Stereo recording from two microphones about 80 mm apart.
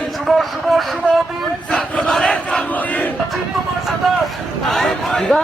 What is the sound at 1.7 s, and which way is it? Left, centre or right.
Crowd, centre.